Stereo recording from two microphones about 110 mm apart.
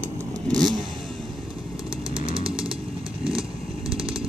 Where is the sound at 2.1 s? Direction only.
50° right (ahead or behind).